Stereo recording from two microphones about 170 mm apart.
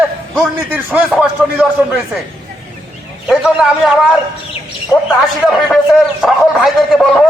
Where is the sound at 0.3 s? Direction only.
10° right (ahead or behind).